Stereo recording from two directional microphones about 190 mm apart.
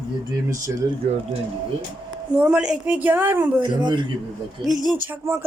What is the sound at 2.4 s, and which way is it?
A woman's voice, 5° right (ahead or behind).